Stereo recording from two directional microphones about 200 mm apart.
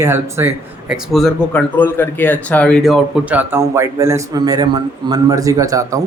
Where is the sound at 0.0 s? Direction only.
10° right (ahead or behind).